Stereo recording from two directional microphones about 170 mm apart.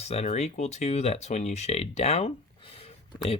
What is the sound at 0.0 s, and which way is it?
Speech, 40° left (ahead or behind).